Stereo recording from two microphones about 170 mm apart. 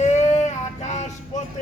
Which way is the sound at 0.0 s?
45° left (ahead or behind).